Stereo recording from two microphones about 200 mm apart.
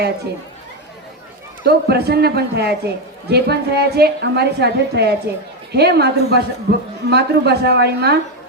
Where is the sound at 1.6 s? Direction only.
55° right (ahead or behind).